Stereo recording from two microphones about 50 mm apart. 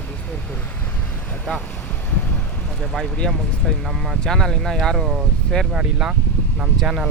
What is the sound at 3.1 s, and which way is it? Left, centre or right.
Speech, centre.